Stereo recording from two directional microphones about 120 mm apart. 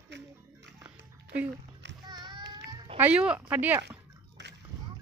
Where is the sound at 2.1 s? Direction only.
35° right (ahead or behind).